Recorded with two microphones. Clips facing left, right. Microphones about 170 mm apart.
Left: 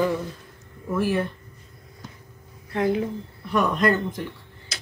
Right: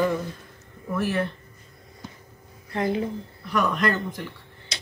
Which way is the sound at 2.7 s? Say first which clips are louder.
Left 3 dB; centre (ahead or behind).